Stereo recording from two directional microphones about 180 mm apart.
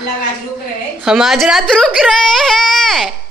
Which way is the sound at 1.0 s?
Centre (ahead or behind).